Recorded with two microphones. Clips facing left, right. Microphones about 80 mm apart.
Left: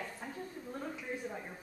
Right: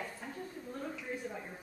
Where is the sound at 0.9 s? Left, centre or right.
Centre.